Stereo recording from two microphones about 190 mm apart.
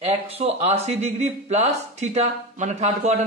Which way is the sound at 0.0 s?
35° right (ahead or behind).